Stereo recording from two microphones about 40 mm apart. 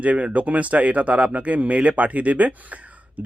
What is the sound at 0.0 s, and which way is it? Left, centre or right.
Speech, right.